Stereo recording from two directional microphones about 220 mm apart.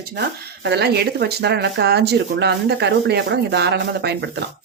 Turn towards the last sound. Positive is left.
turn(degrees=-50)  # may be behind; listen again after turning